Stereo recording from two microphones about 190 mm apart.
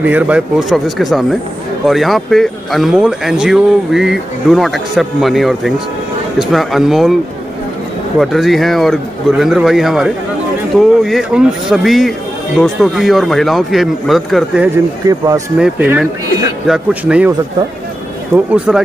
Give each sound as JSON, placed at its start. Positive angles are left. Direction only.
{"t": 0.0, "sound": "speech", "side_deg": -5}
{"t": 8.2, "sound": "speech", "side_deg": 0}
{"t": 15.0, "sound": "speech", "side_deg": -20}
{"t": 15.6, "sound": "speech", "side_deg": -5}
{"t": 18.3, "sound": "speech", "side_deg": -10}